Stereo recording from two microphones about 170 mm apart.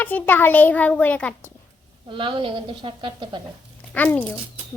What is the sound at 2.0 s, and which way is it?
A woman's voice, 30° right (ahead or behind).